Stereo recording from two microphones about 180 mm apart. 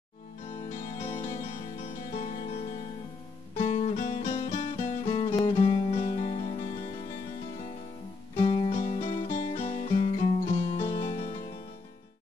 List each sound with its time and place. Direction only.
0.6 s music: 30° left (ahead or behind)
8.4 s music: 30° left (ahead or behind)